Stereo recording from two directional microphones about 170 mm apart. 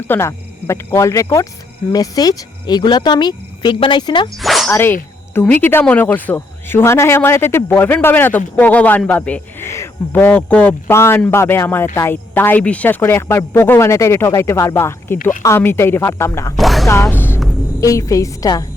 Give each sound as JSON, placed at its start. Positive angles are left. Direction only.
{"t": 0.1, "sound": "a woman's voice", "side_deg": 15}
{"t": 4.4, "sound": "dog", "side_deg": 0}
{"t": 4.7, "sound": "a woman's voice", "side_deg": 10}
{"t": 16.6, "sound": "speech", "side_deg": 0}
{"t": 16.9, "sound": "music", "side_deg": 15}
{"t": 17.7, "sound": "speech", "side_deg": 20}